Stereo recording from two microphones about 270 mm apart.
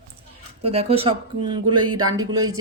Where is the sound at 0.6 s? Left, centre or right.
Right.